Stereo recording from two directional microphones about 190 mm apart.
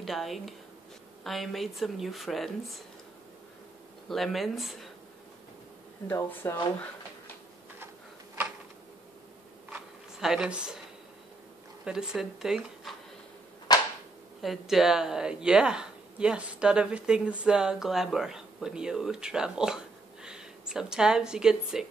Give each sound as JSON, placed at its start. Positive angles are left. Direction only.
{"t": 0.0, "sound": "a woman's voice", "side_deg": 0}
{"t": 4.1, "sound": "a woman's voice", "side_deg": 0}
{"t": 6.0, "sound": "speech", "side_deg": 10}
{"t": 10.2, "sound": "a woman's voice", "side_deg": -5}
{"t": 11.8, "sound": "a woman's voice", "side_deg": -5}
{"t": 13.7, "sound": "whip", "side_deg": 20}
{"t": 14.4, "sound": "a woman's voice", "side_deg": 0}